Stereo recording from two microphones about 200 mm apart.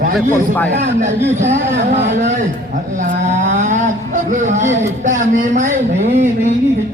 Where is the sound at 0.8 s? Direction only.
35° right (ahead or behind).